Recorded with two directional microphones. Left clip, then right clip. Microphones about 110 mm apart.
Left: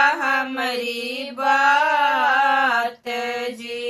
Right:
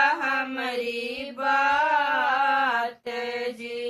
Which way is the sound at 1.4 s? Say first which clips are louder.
Left 5 dB; 30° left (ahead or behind).